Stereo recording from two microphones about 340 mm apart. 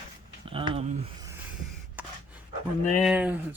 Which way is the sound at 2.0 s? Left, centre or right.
Centre.